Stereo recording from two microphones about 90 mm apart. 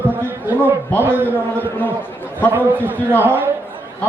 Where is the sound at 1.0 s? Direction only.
25° right (ahead or behind).